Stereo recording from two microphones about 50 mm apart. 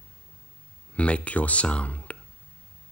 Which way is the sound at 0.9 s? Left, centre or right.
Left.